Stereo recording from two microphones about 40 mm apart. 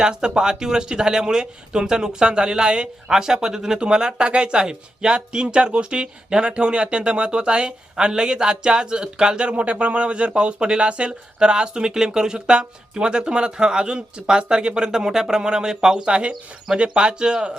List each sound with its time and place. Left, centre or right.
0.0 s speech: right